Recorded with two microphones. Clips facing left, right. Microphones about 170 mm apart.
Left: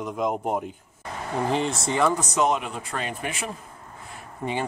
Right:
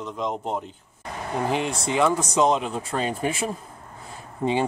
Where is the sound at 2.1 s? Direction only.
25° right (ahead or behind).